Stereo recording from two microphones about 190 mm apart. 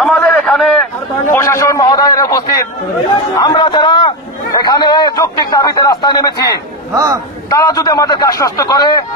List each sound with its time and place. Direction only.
0.3 s a sound: 5° left (ahead or behind)
1.3 s a man's voice: 15° left (ahead or behind)
6.9 s speech: 15° right (ahead or behind)
7.5 s a man's voice: 20° left (ahead or behind)